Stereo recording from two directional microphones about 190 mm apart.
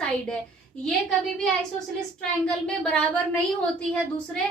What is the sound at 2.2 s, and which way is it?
A woman's voice, 5° left (ahead or behind).